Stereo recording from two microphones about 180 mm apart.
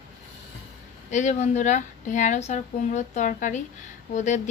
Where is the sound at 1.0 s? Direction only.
40° left (ahead or behind).